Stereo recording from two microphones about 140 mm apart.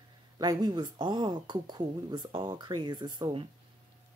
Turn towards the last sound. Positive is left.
turn(degrees=-30)  # may be behind; listen again after turning